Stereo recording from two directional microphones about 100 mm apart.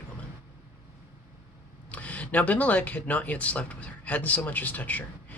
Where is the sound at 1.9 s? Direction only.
15° left (ahead or behind).